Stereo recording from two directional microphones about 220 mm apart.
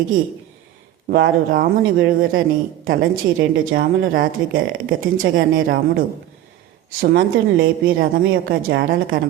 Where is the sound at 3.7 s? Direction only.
40° right (ahead or behind).